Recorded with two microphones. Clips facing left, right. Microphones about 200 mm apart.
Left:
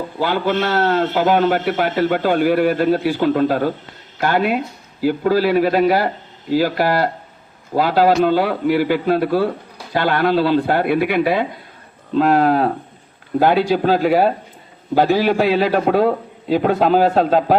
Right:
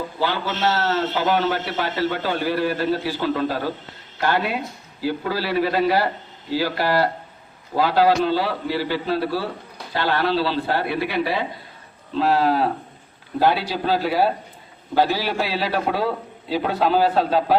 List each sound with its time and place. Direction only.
0.2 s a man's voice: 55° left (ahead or behind)